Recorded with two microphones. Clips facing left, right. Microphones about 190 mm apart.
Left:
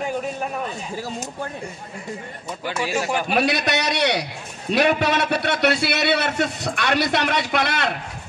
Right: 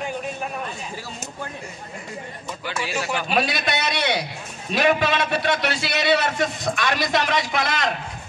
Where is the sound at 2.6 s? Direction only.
45° left (ahead or behind).